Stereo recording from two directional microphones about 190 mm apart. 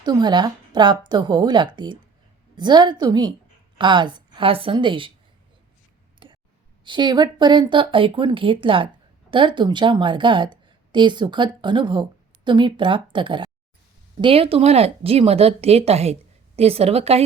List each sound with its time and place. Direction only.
0.0 s a woman's voice: 20° right (ahead or behind)
6.2 s clicking: 25° right (ahead or behind)
6.8 s a woman's voice: 25° right (ahead or behind)